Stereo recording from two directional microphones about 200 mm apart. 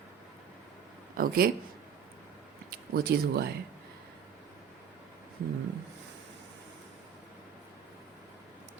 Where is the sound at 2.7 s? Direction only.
50° right (ahead or behind).